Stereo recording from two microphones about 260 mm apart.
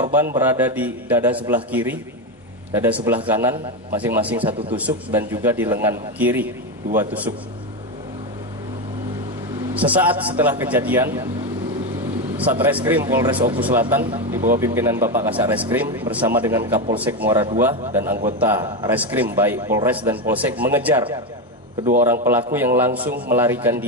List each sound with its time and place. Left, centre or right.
0.0 s a man's voice: centre
4.5 s a man's voice: right
4.7 s a man's voice: centre
9.8 s a man's voice: centre
12.4 s a man's voice: centre
22.0 s a man's voice: centre